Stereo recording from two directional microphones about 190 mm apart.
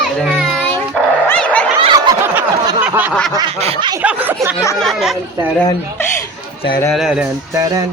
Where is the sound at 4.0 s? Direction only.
10° right (ahead or behind).